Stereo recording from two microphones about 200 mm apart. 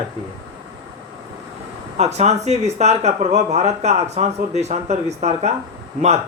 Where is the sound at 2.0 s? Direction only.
35° right (ahead or behind).